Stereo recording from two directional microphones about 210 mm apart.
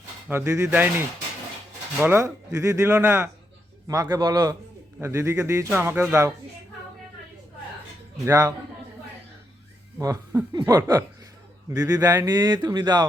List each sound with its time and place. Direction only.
0.3 s a man's voice: 10° right (ahead or behind)
8.2 s a man's voice: 15° right (ahead or behind)
10.0 s a man's voice: 15° right (ahead or behind)